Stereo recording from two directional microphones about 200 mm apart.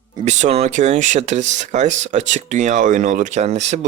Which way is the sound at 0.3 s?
35° right (ahead or behind).